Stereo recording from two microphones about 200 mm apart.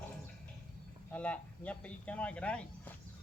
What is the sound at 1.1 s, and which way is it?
Speech, 5° left (ahead or behind).